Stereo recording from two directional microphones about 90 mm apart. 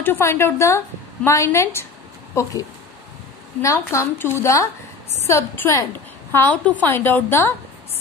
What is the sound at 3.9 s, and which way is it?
A woman's voice, 25° left (ahead or behind).